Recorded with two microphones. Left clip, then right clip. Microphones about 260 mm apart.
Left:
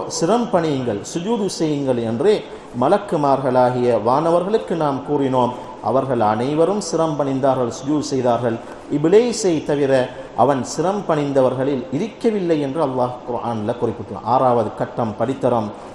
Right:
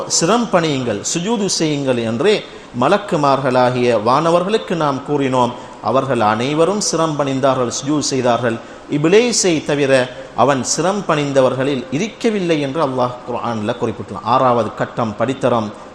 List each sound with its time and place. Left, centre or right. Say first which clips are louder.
0.1 s a man's voice: right 3 dB; right